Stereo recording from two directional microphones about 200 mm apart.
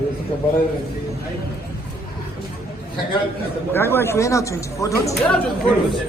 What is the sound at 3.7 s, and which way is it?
Speech, 10° left (ahead or behind).